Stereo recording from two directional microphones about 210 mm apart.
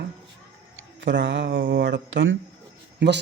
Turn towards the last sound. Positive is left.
turn(degrees=-55)  # may be behind; listen again after turning